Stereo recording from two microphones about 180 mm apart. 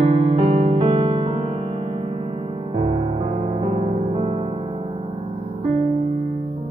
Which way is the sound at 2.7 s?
35° right (ahead or behind).